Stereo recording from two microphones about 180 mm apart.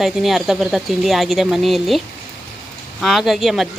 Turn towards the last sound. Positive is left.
turn(degrees=0)  # may be behind; listen again after turning